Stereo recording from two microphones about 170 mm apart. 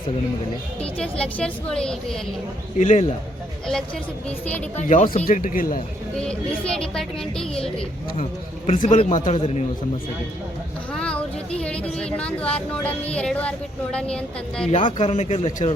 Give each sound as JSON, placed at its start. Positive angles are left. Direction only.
{"t": 0.8, "sound": "a woman's voice", "side_deg": 5}
{"t": 2.7, "sound": "a man's voice", "side_deg": 45}
{"t": 4.3, "sound": "speech", "side_deg": 10}
{"t": 4.8, "sound": "a man's voice", "side_deg": 50}
{"t": 5.4, "sound": "a man's voice", "side_deg": 55}
{"t": 6.1, "sound": "a woman's voice", "side_deg": 5}
{"t": 7.8, "sound": "a man's voice", "side_deg": 40}
{"t": 10.9, "sound": "speech", "side_deg": 5}
{"t": 14.7, "sound": "a man's voice", "side_deg": 45}